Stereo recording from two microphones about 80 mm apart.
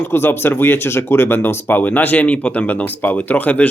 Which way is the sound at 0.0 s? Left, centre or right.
Left.